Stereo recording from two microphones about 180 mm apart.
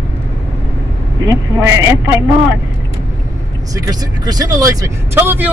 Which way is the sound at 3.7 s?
20° right (ahead or behind).